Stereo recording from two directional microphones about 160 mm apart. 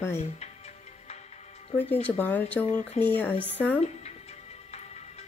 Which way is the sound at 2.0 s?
10° left (ahead or behind).